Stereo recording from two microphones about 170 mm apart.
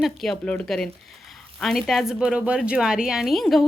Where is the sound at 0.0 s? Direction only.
Centre (ahead or behind).